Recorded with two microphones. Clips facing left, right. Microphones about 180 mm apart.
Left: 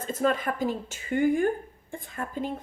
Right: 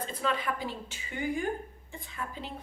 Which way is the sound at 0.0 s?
45° left (ahead or behind).